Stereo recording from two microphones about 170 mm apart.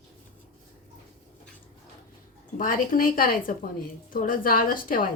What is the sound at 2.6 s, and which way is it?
A woman's voice, 55° left (ahead or behind).